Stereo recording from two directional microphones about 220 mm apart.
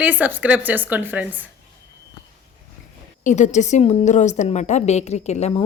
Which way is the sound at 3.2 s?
35° left (ahead or behind).